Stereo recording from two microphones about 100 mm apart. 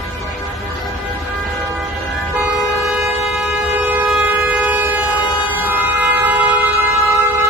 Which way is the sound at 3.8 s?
15° right (ahead or behind).